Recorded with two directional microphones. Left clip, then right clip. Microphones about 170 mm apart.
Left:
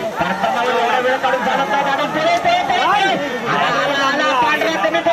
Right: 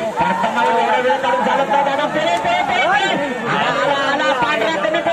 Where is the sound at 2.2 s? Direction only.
25° left (ahead or behind).